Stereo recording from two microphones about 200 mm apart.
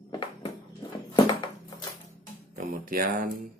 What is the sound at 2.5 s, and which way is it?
Music, 40° right (ahead or behind).